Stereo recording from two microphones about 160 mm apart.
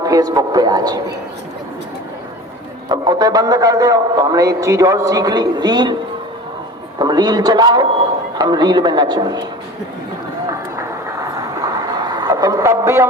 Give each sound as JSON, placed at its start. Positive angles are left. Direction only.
{"t": 0.0, "sound": "a man's voice", "side_deg": -25}
{"t": 2.9, "sound": "a man's voice", "side_deg": -25}
{"t": 7.0, "sound": "a man's voice", "side_deg": -25}
{"t": 11.7, "sound": "a sound", "side_deg": -25}